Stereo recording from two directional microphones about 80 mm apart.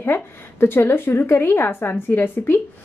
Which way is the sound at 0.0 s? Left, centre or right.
Left.